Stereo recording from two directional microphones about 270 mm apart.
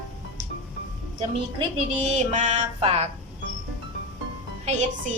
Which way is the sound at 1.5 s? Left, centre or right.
Right.